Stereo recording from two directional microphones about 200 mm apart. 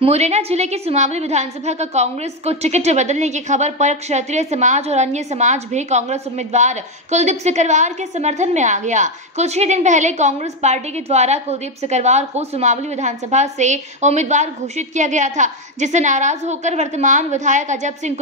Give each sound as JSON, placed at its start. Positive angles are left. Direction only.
{"t": 0.0, "sound": "a woman's voice", "side_deg": -30}